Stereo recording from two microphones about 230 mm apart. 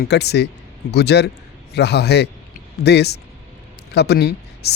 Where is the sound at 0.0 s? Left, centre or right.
Left.